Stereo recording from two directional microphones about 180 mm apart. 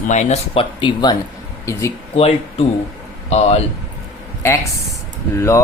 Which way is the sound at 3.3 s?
35° left (ahead or behind).